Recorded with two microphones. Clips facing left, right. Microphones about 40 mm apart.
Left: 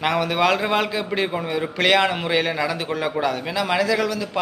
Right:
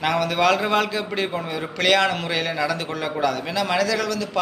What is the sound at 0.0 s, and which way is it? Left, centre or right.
A man's voice, centre.